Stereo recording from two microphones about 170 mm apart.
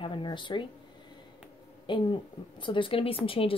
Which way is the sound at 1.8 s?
30° left (ahead or behind).